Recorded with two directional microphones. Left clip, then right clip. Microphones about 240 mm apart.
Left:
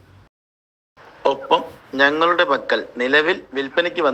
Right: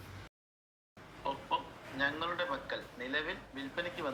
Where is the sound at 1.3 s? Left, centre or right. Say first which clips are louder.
Left 18 dB; left.